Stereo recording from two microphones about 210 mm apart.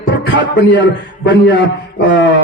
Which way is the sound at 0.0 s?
55° left (ahead or behind).